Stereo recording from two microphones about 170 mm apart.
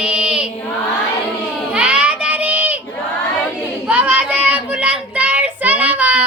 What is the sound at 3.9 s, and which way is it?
Child singing, 10° right (ahead or behind).